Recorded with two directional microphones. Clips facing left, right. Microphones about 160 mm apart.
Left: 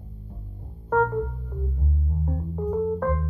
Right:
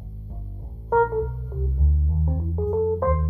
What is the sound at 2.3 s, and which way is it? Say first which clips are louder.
Music: right 3 dB; 20° right (ahead or behind).